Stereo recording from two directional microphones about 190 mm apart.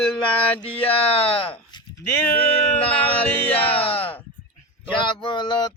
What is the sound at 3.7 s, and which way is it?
Speech, 30° left (ahead or behind).